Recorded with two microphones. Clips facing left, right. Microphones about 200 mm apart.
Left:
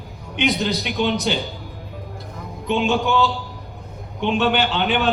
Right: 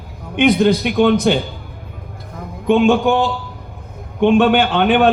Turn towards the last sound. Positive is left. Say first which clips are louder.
# right 7 dB
turn(degrees=-55)  # may be behind; listen again after turning